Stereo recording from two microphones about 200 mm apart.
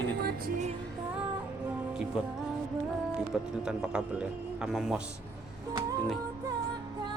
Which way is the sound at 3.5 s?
5° right (ahead or behind).